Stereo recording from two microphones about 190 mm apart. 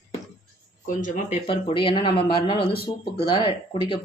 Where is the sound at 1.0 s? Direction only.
45° left (ahead or behind).